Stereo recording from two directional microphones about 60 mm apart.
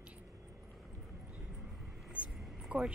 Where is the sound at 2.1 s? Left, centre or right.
Right.